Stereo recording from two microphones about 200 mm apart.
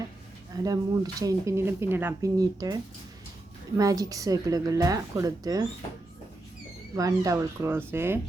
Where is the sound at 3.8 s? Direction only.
15° right (ahead or behind).